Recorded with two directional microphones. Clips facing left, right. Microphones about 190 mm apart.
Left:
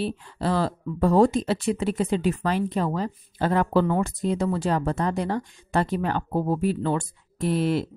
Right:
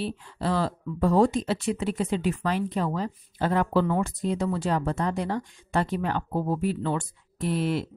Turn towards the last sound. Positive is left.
turn(degrees=35)  # may be behind; listen again after turning